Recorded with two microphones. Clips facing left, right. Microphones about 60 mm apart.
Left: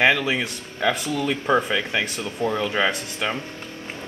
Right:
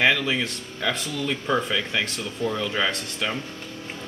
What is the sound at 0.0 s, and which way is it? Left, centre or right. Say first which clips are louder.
Speech: left 2 dB; centre.